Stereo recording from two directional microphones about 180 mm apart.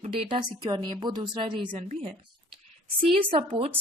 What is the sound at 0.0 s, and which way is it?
A woman's voice, 30° right (ahead or behind).